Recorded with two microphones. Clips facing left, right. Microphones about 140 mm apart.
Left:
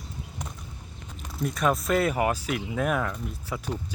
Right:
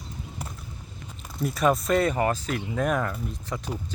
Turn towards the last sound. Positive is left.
turn(degrees=0)  # may be behind; listen again after turning